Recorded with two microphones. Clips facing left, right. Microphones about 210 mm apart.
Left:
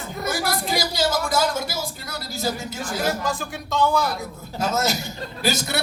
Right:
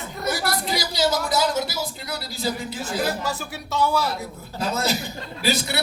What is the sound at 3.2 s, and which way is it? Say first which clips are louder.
Speech: left 2 dB; 5° right (ahead or behind).